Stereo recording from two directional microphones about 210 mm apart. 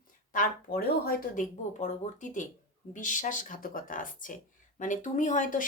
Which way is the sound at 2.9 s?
35° left (ahead or behind).